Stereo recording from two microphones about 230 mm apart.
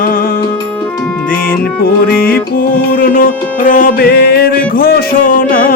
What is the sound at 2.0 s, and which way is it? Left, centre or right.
Music, left.